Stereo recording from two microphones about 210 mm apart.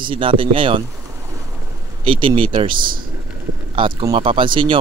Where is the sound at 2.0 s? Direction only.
25° right (ahead or behind).